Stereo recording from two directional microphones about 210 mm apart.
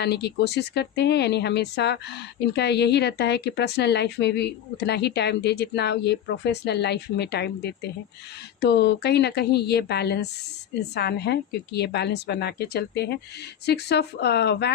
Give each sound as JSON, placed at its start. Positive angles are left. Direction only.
{"t": 0.0, "sound": "speech", "side_deg": 55}